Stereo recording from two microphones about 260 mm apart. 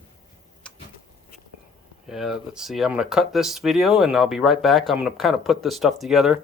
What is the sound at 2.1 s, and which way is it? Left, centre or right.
Speech, centre.